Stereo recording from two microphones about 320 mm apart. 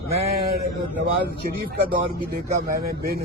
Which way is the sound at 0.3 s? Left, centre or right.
Right.